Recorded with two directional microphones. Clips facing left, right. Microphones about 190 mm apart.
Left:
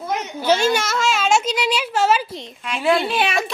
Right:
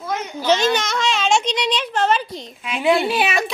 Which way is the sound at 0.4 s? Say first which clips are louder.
Even; 10° left (ahead or behind).